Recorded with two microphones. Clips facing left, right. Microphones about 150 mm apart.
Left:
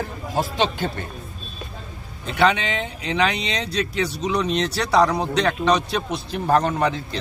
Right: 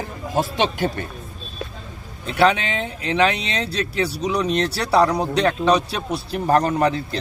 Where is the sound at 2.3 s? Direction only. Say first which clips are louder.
Right 2 dB; 5° right (ahead or behind).